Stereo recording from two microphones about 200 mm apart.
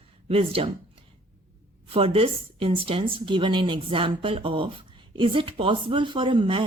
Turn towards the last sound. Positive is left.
turn(degrees=-25)  # may be behind; listen again after turning